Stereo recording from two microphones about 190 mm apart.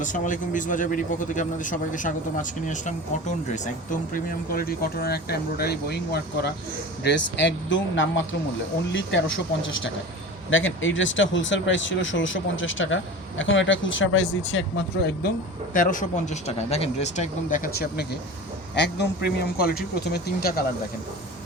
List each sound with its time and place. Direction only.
0.0 s a man's voice: 40° left (ahead or behind)
4.1 s speech: 50° left (ahead or behind); by 9.2 s 70° left (ahead or behind)
10.5 s speech: 85° left; by 15.3 s 65° left (ahead or behind)
15.7 s a man's voice: 45° left (ahead or behind)